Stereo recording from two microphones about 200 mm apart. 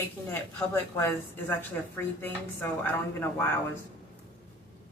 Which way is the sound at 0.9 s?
15° left (ahead or behind).